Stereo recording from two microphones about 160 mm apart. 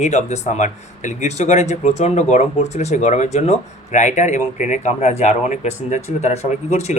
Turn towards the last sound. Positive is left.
turn(degrees=45)  # may be behind; listen again after turning